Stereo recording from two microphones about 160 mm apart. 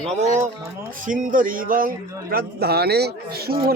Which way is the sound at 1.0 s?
55° right (ahead or behind).